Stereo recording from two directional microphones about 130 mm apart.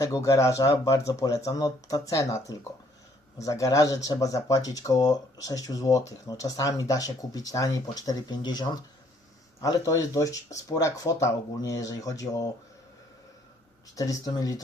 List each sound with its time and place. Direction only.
0.0 s speech: 25° left (ahead or behind)
13.9 s speech: 25° left (ahead or behind)